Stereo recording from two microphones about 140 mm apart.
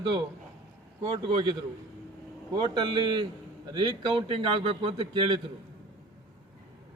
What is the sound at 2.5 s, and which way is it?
A man's voice, 35° right (ahead or behind).